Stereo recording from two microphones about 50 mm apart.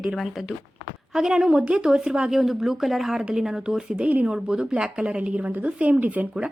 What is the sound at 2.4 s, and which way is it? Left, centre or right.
A woman's voice, centre.